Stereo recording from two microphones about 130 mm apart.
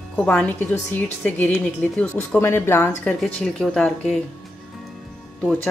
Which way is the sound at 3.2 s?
5° left (ahead or behind).